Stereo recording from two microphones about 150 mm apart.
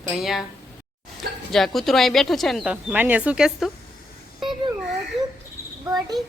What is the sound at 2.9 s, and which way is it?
Speech, 10° right (ahead or behind).